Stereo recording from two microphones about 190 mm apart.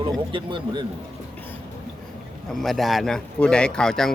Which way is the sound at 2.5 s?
Centre (ahead or behind).